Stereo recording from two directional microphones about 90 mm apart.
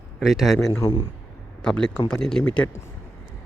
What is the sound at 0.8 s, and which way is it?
Speech, 30° left (ahead or behind).